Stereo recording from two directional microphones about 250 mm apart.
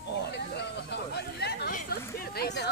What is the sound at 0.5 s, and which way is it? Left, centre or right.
Speech, left.